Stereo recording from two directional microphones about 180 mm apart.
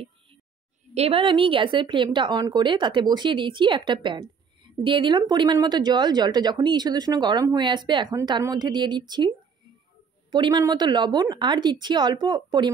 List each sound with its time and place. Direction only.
0.9 s a woman's voice: 35° right (ahead or behind)
10.3 s a woman's voice: 25° right (ahead or behind)